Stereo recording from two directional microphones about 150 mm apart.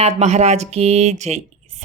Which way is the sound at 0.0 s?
50° right (ahead or behind).